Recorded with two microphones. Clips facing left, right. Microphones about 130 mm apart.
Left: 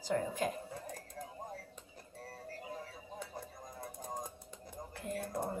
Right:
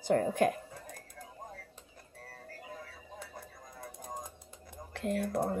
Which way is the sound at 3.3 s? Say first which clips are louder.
Left 2 dB; 25° left (ahead or behind).